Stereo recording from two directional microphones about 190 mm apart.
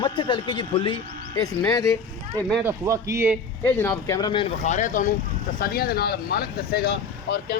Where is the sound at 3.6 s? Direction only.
15° left (ahead or behind); by 7.5 s 60° left (ahead or behind).